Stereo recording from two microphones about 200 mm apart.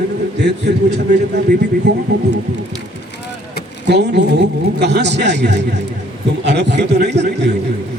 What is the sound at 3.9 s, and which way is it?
A man's voice, 60° right (ahead or behind).